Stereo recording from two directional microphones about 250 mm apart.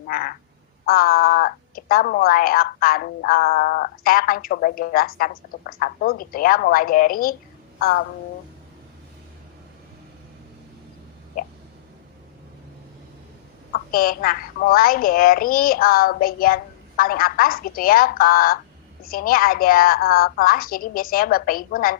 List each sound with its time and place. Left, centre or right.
0.1 s speech: left
13.7 s speech: left